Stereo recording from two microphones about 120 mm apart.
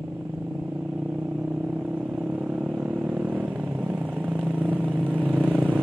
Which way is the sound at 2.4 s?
10° right (ahead or behind).